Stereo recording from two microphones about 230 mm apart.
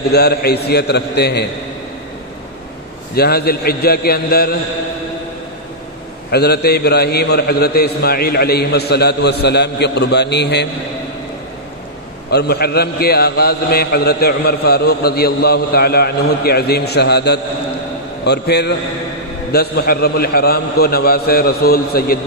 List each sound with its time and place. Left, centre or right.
0.1 s a man's voice: left
3.2 s a man's voice: left
6.3 s a man's voice: left
12.3 s a man's voice: left